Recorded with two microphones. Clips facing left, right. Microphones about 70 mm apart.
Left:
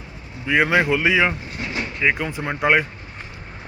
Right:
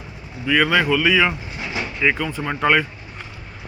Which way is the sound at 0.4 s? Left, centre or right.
Left.